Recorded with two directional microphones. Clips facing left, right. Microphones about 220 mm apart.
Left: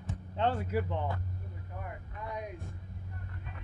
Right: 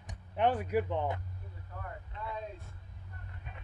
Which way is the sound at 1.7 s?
15° left (ahead or behind).